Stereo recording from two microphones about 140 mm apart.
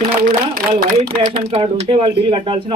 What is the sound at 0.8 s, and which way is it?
Speech, 90° right.